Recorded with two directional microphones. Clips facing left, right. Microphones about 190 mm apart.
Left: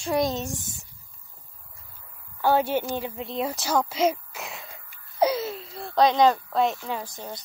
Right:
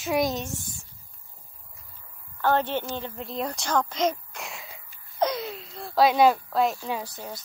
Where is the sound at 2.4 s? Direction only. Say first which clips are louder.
Left 2 dB; 10° left (ahead or behind).